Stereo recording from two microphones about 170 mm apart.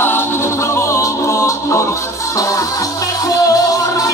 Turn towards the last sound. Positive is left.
turn(degrees=20)  # may be behind; listen again after turning